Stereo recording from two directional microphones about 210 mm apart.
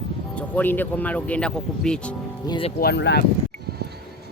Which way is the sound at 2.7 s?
50° left (ahead or behind).